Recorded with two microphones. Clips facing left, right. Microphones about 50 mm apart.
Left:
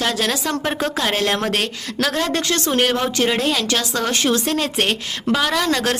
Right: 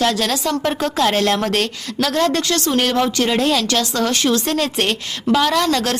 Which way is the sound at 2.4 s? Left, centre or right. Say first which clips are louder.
Right 1 dB; left.